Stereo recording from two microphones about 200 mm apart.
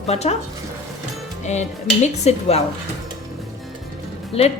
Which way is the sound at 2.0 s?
30° left (ahead or behind).